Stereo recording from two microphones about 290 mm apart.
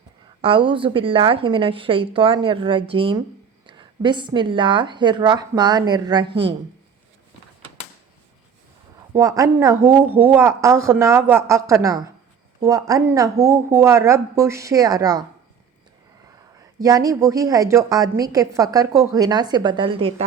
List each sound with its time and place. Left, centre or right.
0.4 s a woman's voice: centre
9.1 s a woman's voice: centre
16.8 s a woman's voice: centre